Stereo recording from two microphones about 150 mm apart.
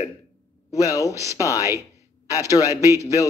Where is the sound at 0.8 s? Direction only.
25° left (ahead or behind).